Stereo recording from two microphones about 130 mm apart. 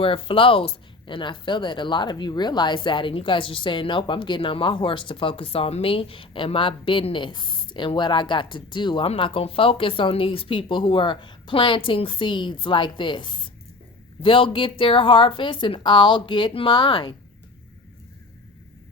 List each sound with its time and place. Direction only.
0.0 s speech: 45° left (ahead or behind)